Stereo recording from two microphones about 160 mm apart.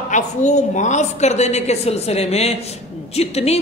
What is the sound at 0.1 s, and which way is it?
A man's voice, 50° left (ahead or behind).